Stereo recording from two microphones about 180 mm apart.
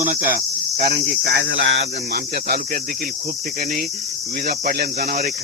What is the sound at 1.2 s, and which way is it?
Cricket, 75° right (ahead or behind).